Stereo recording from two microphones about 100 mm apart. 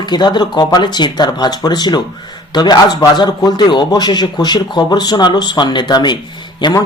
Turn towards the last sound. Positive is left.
turn(degrees=50)  # may be behind; listen again after turning